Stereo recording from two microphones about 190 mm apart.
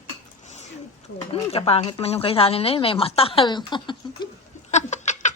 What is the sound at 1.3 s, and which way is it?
Speech, 30° left (ahead or behind).